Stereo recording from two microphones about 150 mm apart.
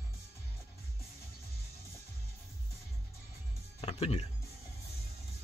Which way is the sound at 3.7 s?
40° left (ahead or behind).